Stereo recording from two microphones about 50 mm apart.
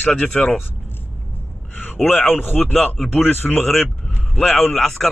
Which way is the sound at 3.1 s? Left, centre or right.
Left.